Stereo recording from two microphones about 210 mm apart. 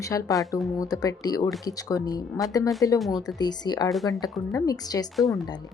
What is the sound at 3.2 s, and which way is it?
A woman's voice, 20° left (ahead or behind).